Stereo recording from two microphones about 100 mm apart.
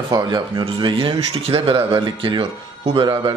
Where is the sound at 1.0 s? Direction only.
70° right (ahead or behind).